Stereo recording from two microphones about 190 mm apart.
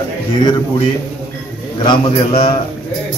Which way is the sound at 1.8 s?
25° left (ahead or behind).